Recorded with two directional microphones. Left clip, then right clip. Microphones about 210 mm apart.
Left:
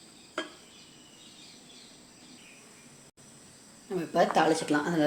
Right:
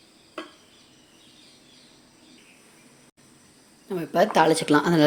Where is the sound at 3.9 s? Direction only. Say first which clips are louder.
Right 4 dB; 35° right (ahead or behind).